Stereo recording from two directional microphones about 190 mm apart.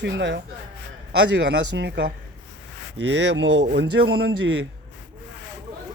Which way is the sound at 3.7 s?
55° right (ahead or behind).